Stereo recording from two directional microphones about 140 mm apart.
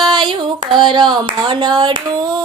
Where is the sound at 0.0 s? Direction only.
30° right (ahead or behind).